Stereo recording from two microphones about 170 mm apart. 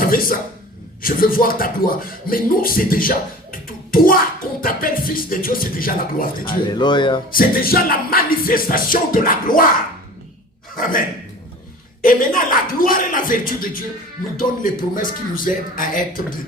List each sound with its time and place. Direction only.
0.0 s a sound: 55° left (ahead or behind)
1.0 s speech: 55° left (ahead or behind)
6.5 s speech: 25° left (ahead or behind)
7.3 s speech: 60° left (ahead or behind)
10.8 s speech: 55° left (ahead or behind)
12.0 s speech: 55° left (ahead or behind)